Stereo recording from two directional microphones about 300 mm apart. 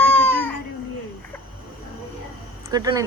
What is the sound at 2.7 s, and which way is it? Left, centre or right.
Speech, centre.